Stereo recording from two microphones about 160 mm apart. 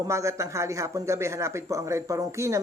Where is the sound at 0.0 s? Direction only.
20° right (ahead or behind).